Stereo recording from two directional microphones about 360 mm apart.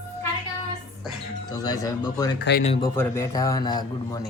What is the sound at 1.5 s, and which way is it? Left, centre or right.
Speech, centre.